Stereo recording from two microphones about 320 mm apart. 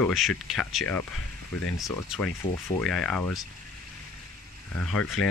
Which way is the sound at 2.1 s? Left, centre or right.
Centre.